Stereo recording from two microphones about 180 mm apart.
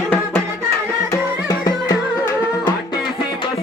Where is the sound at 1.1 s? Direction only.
20° left (ahead or behind).